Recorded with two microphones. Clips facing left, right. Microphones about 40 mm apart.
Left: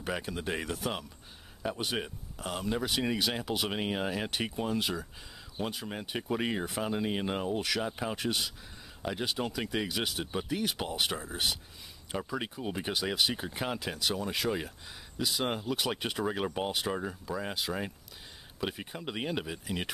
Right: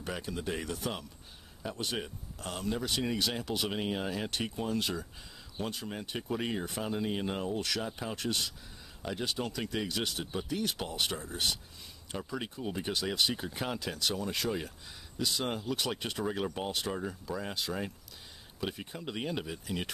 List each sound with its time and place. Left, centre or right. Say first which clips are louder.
0.0 s speech: left 2 dB; centre
0.7 s speech: left 2 dB; centre